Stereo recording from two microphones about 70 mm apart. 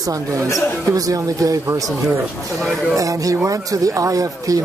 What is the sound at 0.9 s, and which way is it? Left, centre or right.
Speech, right.